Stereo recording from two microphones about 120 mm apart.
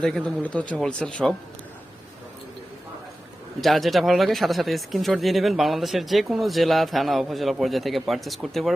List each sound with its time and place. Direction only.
0.0 s speech: 10° left (ahead or behind)
3.6 s speech: centre (ahead or behind)